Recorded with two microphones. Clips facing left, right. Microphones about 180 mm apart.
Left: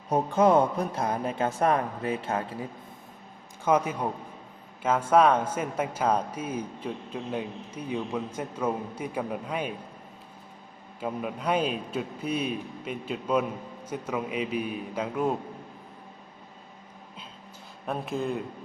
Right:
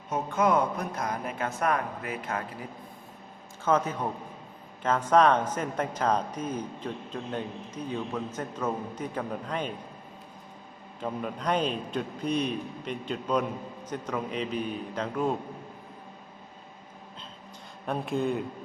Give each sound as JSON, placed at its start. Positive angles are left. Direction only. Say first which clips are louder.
{"t": 0.1, "sound": "speech", "louder": "left 4 dB", "side_deg": 30}
{"t": 3.6, "sound": "speech", "louder": "left 1 dB", "side_deg": 10}
{"t": 11.0, "sound": "speech", "louder": "left 1 dB", "side_deg": 5}
{"t": 17.8, "sound": "speech", "louder": "right 2 dB", "side_deg": 0}